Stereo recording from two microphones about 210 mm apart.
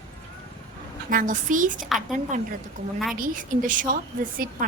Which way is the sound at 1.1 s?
40° right (ahead or behind).